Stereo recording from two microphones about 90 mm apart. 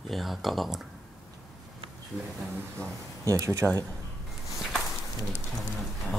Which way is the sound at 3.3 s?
35° right (ahead or behind).